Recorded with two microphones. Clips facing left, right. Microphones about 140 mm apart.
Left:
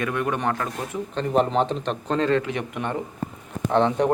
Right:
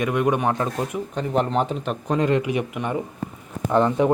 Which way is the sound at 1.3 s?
Centre (ahead or behind).